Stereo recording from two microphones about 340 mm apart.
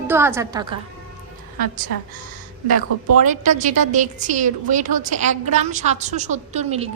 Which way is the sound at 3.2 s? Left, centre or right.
Right.